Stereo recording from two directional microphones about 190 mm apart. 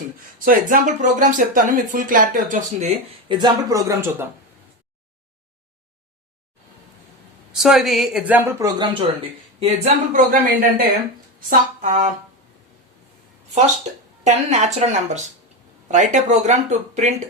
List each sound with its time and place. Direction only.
0.3 s speech: 45° right (ahead or behind)
3.2 s a woman's voice: 20° right (ahead or behind)
7.6 s a woman's voice: centre (ahead or behind); by 9.0 s 25° right (ahead or behind)
9.6 s speech: 35° right (ahead or behind)
10.2 s speech: 45° right (ahead or behind)
14.3 s speech: 35° right (ahead or behind)